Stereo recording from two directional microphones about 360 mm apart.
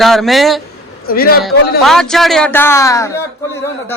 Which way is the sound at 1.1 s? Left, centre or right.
Left.